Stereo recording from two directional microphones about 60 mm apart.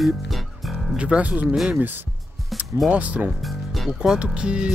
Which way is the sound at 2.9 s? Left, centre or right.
Right.